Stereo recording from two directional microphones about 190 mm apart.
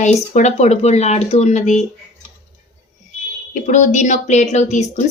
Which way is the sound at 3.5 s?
40° left (ahead or behind).